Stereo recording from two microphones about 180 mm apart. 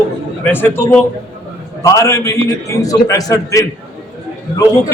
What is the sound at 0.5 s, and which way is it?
A man's voice, 10° left (ahead or behind).